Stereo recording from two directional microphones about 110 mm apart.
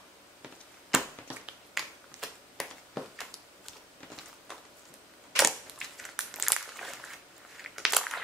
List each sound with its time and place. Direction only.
0.9 s a sound: 5° right (ahead or behind)
1.8 s finger snapping: centre (ahead or behind)
5.3 s crushing: centre (ahead or behind)